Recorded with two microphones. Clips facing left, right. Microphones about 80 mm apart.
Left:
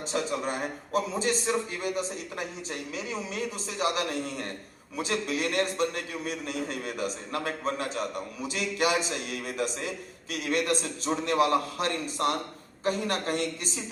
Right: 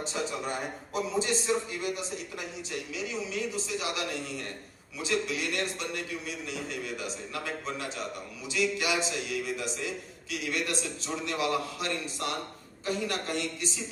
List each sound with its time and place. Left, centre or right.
0.0 s a man's voice: left
1.8 s a man's voice: left